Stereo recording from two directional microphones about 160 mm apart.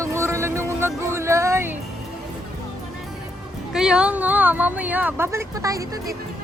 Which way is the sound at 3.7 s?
5° right (ahead or behind).